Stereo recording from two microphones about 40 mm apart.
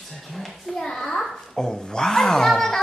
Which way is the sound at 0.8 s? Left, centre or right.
Centre.